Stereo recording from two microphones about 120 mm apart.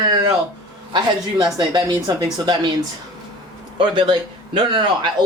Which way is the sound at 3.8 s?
45° right (ahead or behind).